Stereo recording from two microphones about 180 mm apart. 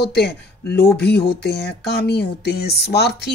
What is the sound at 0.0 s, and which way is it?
Speech, 65° left (ahead or behind).